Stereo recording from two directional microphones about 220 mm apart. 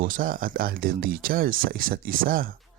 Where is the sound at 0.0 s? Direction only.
40° right (ahead or behind).